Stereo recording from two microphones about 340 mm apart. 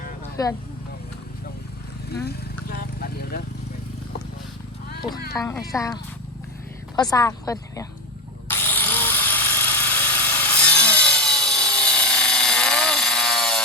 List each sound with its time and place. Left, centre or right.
0.4 s speech: centre
2.7 s vehicle: left
5.3 s speech: centre
8.4 s electric toothbrush: centre